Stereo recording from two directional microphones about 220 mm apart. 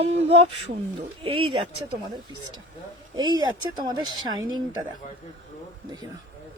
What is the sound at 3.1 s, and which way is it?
A woman's voice, 20° right (ahead or behind).